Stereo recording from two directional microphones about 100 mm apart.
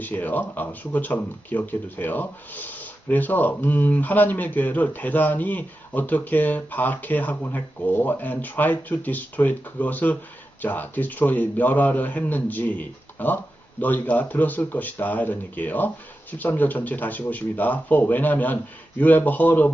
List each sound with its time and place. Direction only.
0.0 s speech: 15° left (ahead or behind)